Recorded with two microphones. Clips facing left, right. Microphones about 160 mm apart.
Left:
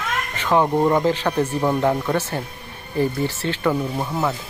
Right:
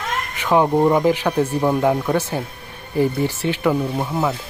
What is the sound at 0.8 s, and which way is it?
Speech, 15° right (ahead or behind).